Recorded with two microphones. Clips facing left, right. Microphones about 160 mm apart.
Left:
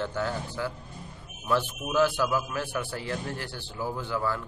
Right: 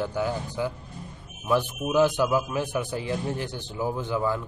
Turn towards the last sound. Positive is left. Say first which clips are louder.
# right 3 dB
turn(degrees=-15)  # may be behind; listen again after turning